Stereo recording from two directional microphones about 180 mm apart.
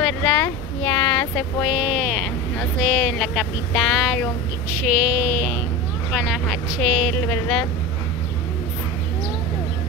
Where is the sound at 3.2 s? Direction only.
Centre (ahead or behind).